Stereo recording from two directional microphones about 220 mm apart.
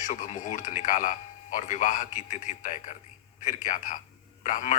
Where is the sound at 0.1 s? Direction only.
35° left (ahead or behind).